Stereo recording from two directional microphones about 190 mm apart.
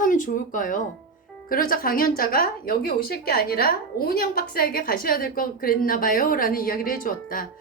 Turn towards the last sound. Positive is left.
turn(degrees=45)  # may be behind; listen again after turning